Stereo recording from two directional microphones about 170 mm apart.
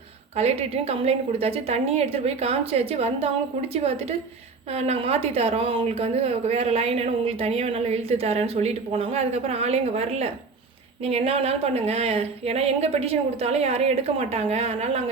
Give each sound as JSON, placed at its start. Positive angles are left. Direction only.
{"t": 0.3, "sound": "a woman's voice", "side_deg": -40}